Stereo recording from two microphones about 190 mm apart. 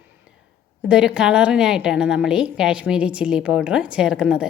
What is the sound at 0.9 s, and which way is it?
A woman's voice, 5° right (ahead or behind).